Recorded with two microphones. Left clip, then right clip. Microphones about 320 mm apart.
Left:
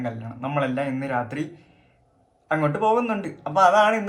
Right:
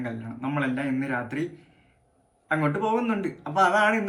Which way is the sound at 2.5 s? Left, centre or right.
Centre.